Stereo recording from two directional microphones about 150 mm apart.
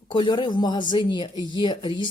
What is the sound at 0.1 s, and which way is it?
Speech, 30° left (ahead or behind).